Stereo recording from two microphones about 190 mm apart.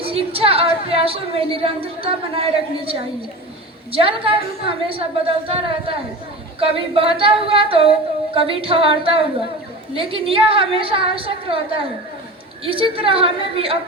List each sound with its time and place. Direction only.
0.0 s a woman's voice: 30° right (ahead or behind)
3.9 s singing: 30° right (ahead or behind)